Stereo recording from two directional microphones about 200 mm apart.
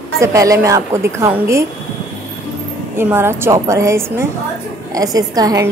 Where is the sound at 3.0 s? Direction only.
10° right (ahead or behind).